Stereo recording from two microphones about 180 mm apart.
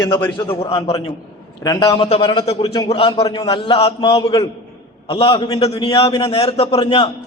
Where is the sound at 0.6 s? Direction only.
30° left (ahead or behind).